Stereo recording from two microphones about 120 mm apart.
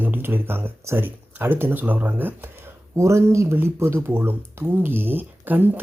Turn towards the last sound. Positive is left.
turn(degrees=-15)  # may be behind; listen again after turning